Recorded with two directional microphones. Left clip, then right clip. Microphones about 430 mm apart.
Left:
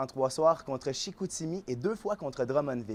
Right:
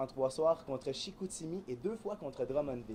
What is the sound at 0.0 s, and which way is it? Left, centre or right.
Speech, left.